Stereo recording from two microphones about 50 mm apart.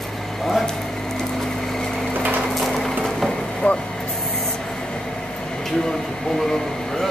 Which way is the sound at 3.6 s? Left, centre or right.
Left.